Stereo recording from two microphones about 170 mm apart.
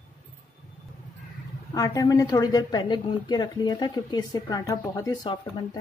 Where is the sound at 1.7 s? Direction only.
20° left (ahead or behind).